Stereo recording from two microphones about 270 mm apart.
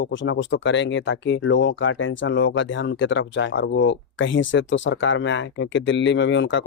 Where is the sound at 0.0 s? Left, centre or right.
Left.